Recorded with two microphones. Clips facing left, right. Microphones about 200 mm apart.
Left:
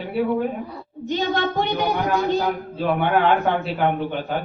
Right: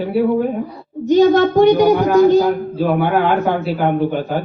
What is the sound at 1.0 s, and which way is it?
A child's voice, 45° right (ahead or behind).